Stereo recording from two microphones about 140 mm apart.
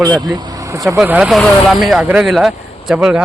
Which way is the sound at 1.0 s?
5° right (ahead or behind).